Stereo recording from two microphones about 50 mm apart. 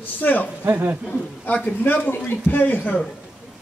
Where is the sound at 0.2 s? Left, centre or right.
Left.